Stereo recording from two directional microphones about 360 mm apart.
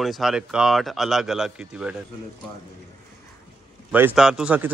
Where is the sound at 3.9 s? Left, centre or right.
Centre.